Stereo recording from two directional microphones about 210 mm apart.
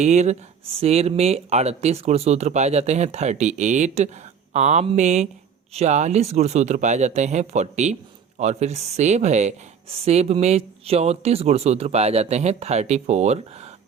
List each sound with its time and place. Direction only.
0.0 s speech: 35° right (ahead or behind)